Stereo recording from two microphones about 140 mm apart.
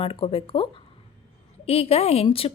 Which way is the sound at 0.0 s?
45° left (ahead or behind).